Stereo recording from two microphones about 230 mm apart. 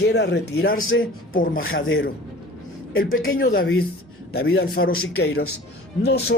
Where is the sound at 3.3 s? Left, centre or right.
Left.